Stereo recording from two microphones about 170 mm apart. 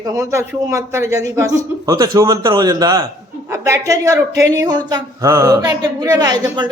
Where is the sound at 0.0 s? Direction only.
20° right (ahead or behind).